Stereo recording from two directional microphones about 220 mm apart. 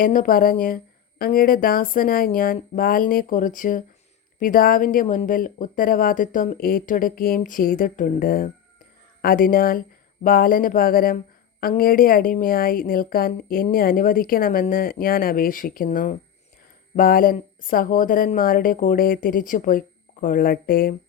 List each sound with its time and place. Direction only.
0.0 s a woman's voice: 40° left (ahead or behind)